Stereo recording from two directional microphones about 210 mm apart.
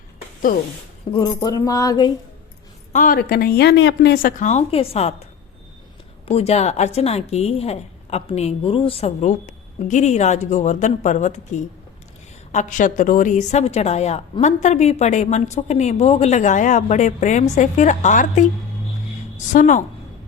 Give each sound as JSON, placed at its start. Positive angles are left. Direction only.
{"t": 1.1, "sound": "speech", "side_deg": 20}
{"t": 2.9, "sound": "speech", "side_deg": 40}
{"t": 6.2, "sound": "a woman's voice", "side_deg": 30}
{"t": 19.5, "sound": "a woman's voice", "side_deg": 35}